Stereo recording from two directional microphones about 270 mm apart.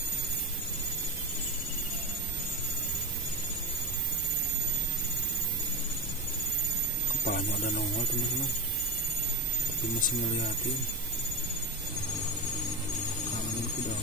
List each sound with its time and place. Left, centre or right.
7.2 s speech: left